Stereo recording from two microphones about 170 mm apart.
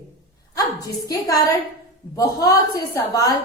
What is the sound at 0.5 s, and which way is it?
A woman's voice, 20° left (ahead or behind).